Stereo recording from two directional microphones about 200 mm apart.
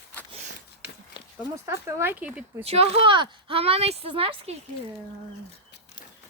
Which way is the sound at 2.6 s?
30° right (ahead or behind).